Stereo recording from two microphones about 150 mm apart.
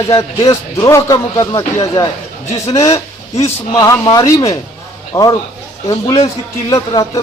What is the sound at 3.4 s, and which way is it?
Speech, 20° left (ahead or behind).